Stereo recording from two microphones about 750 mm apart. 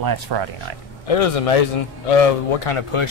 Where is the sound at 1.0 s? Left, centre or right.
Left.